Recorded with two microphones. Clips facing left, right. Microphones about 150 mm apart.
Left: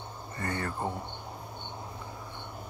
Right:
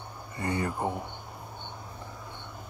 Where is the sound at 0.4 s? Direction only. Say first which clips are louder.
Right 3 dB; 15° right (ahead or behind).